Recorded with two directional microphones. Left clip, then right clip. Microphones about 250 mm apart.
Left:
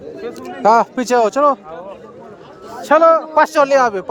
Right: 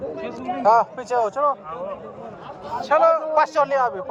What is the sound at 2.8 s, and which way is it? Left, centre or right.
A man's voice, left.